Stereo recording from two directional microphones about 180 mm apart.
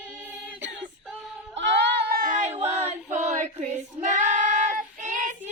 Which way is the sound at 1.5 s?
80° right.